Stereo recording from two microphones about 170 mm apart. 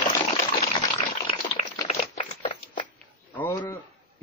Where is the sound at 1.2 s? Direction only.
35° left (ahead or behind).